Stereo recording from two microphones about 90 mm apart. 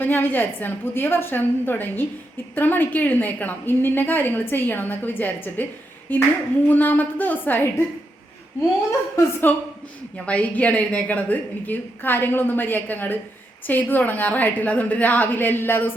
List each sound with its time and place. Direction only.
0.0 s a woman's voice: 25° left (ahead or behind)
9.1 s a woman's voice: 20° left (ahead or behind)